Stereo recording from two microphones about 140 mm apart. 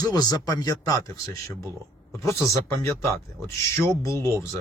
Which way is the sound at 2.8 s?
20° left (ahead or behind).